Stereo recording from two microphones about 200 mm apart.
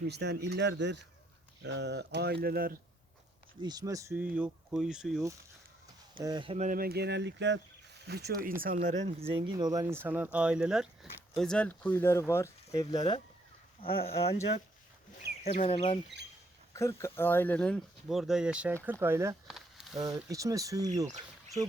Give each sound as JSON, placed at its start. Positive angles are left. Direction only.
{"t": 0.1, "sound": "speech", "side_deg": -55}
{"t": 3.6, "sound": "speech", "side_deg": -20}
{"t": 6.2, "sound": "speech", "side_deg": -25}
{"t": 6.7, "sound": "speech", "side_deg": -45}
{"t": 14.0, "sound": "speech", "side_deg": 30}
{"t": 15.5, "sound": "speech", "side_deg": 30}
{"t": 16.7, "sound": "speech", "side_deg": 15}
{"t": 19.5, "sound": "a sound", "side_deg": 0}
{"t": 20.0, "sound": "speech", "side_deg": -15}